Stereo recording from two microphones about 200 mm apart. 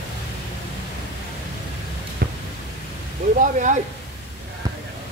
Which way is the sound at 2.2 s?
50° right (ahead or behind).